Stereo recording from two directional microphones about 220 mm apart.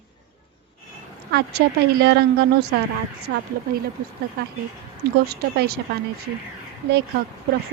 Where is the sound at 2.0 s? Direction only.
45° right (ahead or behind).